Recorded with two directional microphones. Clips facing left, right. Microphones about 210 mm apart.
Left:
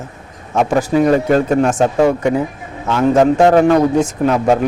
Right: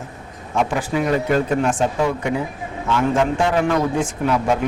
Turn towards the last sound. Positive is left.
turn(degrees=45)  # may be behind; listen again after turning